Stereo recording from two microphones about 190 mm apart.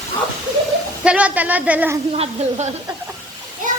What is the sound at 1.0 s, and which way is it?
Speech, 5° right (ahead or behind).